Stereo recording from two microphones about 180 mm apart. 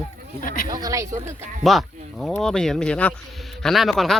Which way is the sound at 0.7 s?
20° right (ahead or behind).